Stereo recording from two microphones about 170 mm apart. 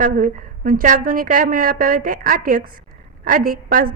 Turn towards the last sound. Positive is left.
turn(degrees=-55)  # may be behind; listen again after turning